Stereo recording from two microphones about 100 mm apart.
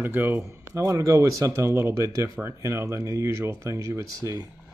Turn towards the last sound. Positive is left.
turn(degrees=-30)  # may be behind; listen again after turning